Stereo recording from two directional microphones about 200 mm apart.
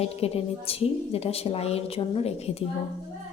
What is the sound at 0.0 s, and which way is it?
A woman's voice, 30° left (ahead or behind).